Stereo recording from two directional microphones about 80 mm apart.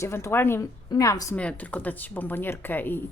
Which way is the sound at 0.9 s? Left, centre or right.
Left.